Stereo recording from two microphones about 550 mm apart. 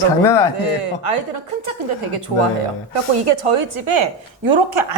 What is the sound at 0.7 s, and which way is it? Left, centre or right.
Speech, right.